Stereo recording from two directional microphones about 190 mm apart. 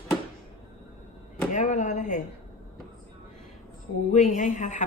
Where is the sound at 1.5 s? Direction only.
40° left (ahead or behind).